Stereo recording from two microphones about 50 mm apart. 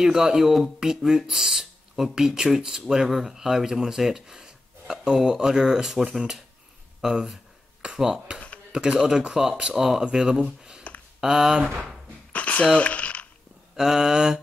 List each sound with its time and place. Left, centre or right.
0.0 s speech: centre
12.3 s a sound: left
13.7 s speech: centre